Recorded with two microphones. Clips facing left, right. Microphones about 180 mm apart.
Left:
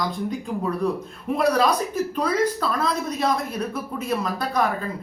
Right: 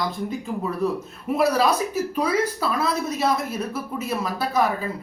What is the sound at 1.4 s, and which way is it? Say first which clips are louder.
Speech: even; 5° right (ahead or behind).